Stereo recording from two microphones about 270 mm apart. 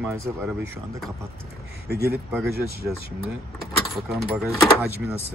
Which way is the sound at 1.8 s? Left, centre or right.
Right.